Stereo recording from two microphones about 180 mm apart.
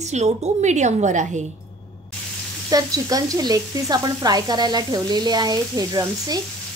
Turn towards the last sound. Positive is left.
turn(degrees=-20)  # may be behind; listen again after turning